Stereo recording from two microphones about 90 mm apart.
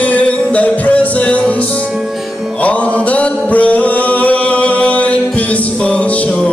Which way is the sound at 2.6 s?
15° left (ahead or behind).